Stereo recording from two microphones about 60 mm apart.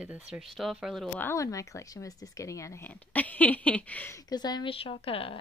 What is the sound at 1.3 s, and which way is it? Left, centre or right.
Speech, left.